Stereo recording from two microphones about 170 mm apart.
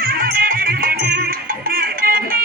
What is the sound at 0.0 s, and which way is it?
Music, 60° right (ahead or behind).